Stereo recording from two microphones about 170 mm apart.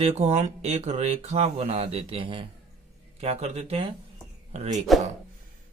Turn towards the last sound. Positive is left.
turn(degrees=-35)  # may be behind; listen again after turning